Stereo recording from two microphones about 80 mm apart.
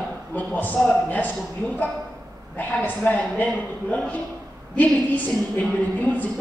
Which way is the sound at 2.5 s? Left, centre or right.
Left.